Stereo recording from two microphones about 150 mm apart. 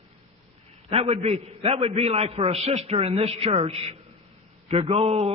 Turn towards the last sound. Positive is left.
turn(degrees=-45)  # may be behind; listen again after turning